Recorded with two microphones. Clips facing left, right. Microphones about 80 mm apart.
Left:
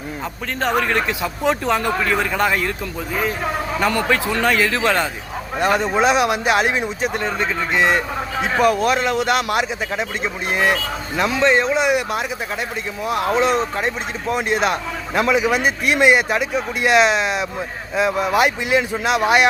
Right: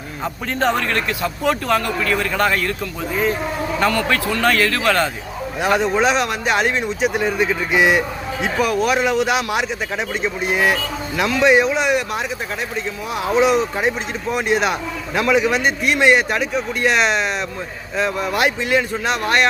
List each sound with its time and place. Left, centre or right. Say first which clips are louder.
0.8 s speech: left 1 dB; centre
3.8 s speech: even; centre
5.5 s speech: even; centre
7.1 s speech: right 3 dB; centre